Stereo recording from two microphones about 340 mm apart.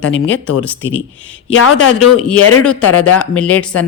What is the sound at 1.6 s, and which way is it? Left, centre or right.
Speech, left.